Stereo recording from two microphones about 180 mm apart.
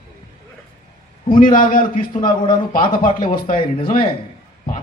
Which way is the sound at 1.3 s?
50° left (ahead or behind).